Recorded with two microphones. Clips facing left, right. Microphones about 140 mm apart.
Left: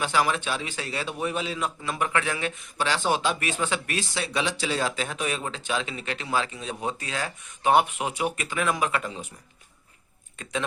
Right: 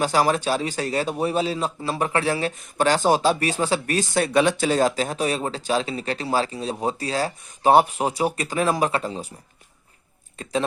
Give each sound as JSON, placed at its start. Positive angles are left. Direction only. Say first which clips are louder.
{"t": 0.0, "sound": "a man's voice", "louder": "right 5 dB", "side_deg": -40}
{"t": 10.3, "sound": "speech", "louder": "right 6 dB", "side_deg": -35}